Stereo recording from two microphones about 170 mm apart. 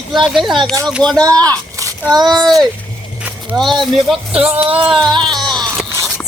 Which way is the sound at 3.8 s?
Centre (ahead or behind).